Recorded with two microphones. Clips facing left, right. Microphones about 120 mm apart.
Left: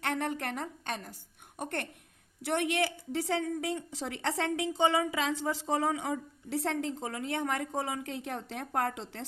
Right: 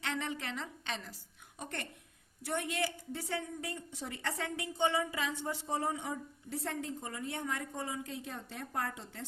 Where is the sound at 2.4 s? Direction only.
75° left (ahead or behind).